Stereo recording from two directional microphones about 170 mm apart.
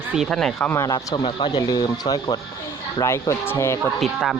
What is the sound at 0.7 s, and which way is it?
Speech, 20° left (ahead or behind).